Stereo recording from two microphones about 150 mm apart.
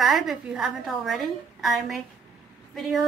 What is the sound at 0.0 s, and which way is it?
A woman's voice, centre (ahead or behind).